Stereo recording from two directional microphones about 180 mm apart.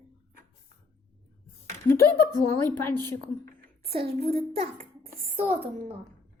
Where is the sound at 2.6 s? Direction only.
10° left (ahead or behind).